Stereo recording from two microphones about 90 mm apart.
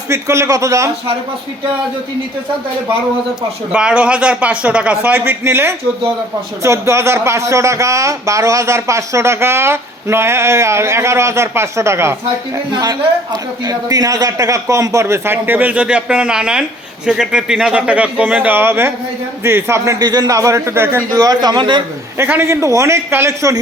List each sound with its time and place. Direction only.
0.1 s speech: 35° right (ahead or behind)
3.7 s speech: 10° right (ahead or behind); by 12.1 s 30° right (ahead or behind)
12.7 s speech: 45° right (ahead or behind)
20.0 s speech: 45° right (ahead or behind); by 21.0 s 30° right (ahead or behind)
21.1 s a man's voice: 45° right (ahead or behind); by 21.8 s 60° right (ahead or behind)
22.2 s speech: 25° right (ahead or behind)